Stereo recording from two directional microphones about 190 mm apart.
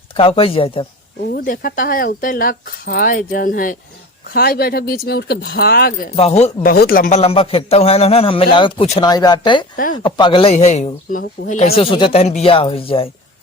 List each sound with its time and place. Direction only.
0.2 s a man's voice: 30° left (ahead or behind)
1.3 s speech: 50° left (ahead or behind)
6.1 s speech: 35° left (ahead or behind)
6.7 s speech: 50° left (ahead or behind)
7.2 s a man's voice: 30° left (ahead or behind)
9.7 s speech: 45° left (ahead or behind)
10.0 s a man's voice: 25° left (ahead or behind)